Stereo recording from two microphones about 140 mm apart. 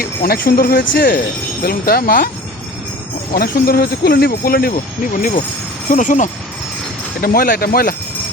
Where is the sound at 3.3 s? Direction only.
90° left.